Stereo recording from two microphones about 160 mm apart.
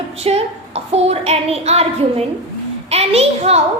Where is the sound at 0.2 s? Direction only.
40° right (ahead or behind).